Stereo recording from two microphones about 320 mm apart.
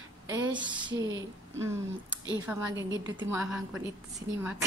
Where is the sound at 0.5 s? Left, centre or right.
Centre.